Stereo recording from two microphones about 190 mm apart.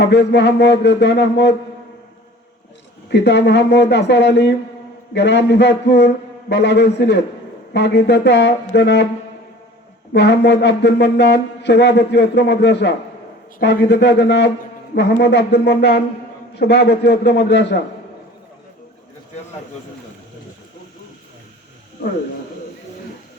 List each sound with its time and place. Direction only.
0.0 s speech: 65° left (ahead or behind)
3.1 s speech: 65° left (ahead or behind)
10.1 s speech: 65° left (ahead or behind)